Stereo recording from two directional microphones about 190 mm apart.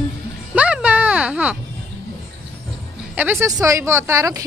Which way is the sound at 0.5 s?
5° right (ahead or behind).